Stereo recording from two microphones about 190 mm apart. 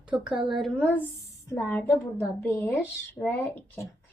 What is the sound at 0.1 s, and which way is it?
A woman's voice, 5° right (ahead or behind).